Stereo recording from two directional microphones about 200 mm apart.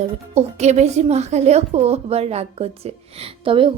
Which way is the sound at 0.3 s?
35° right (ahead or behind).